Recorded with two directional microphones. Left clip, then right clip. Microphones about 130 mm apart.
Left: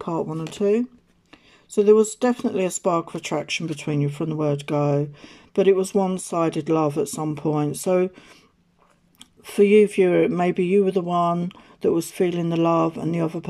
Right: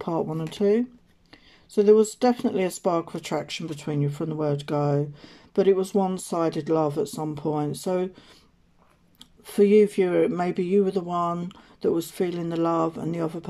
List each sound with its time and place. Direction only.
0.0 s speech: 5° left (ahead or behind)
9.4 s speech: 15° left (ahead or behind)